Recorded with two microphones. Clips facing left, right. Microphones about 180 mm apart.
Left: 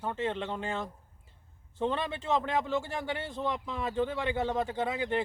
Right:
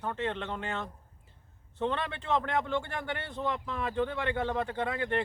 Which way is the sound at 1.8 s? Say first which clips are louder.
Left 1 dB; 10° left (ahead or behind).